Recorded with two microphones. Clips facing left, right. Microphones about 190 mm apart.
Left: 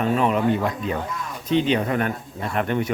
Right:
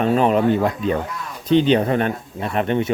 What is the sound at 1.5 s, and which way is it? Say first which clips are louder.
Speech: right 5 dB; 30° right (ahead or behind).